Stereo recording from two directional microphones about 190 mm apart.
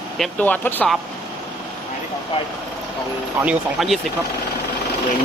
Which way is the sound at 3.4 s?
5° right (ahead or behind).